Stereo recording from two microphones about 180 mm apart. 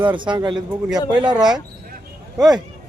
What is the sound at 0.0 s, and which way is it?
Speech, 25° right (ahead or behind).